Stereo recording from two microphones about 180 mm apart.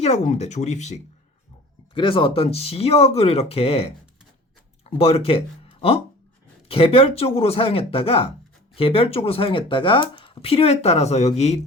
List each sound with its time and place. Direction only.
0.0 s speech: 35° left (ahead or behind)
2.0 s speech: 30° left (ahead or behind)
6.7 s speech: 30° left (ahead or behind)